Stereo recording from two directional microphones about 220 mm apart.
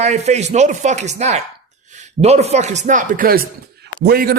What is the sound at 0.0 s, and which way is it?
A man's voice, 30° right (ahead or behind).